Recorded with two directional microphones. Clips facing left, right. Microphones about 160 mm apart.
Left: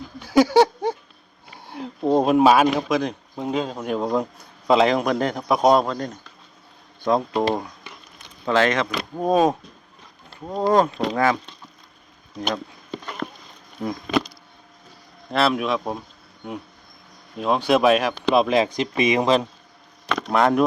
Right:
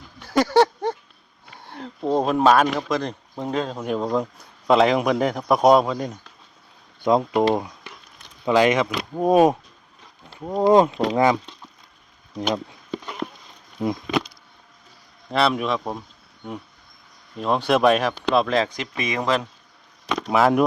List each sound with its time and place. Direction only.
0.2 s a sound: 5° left (ahead or behind)
1.5 s speech: 5° left (ahead or behind)
7.0 s speech: 15° right (ahead or behind)
12.9 s a sound: 10° right (ahead or behind)
15.3 s speech: centre (ahead or behind)
17.3 s speech: centre (ahead or behind)
18.3 s a man's voice: 15° left (ahead or behind)
20.1 s speech: 5° right (ahead or behind)